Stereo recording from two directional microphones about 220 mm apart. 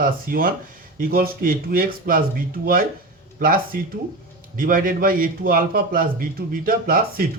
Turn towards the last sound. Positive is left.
turn(degrees=-40)  # may be behind; listen again after turning